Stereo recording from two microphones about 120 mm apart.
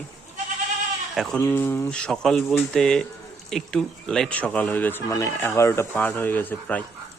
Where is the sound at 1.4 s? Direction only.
20° left (ahead or behind).